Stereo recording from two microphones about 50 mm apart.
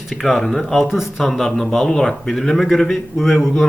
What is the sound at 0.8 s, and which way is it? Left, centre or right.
Speech, centre.